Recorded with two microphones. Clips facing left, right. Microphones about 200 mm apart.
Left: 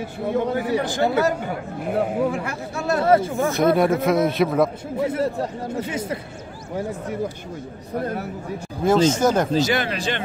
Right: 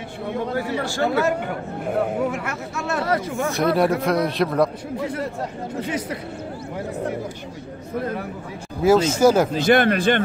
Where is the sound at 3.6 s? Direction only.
Centre (ahead or behind).